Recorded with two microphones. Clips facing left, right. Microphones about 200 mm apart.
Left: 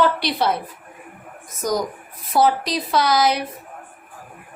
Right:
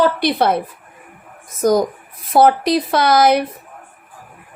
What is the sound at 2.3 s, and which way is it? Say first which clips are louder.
Speech: right 6 dB; 55° right (ahead or behind).